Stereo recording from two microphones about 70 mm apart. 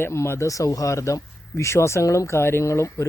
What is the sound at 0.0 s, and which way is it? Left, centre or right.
Speech, left.